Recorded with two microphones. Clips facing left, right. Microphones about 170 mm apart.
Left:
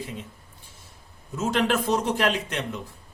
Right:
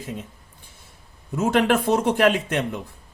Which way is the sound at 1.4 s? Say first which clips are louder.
Right 4 dB; 60° right (ahead or behind).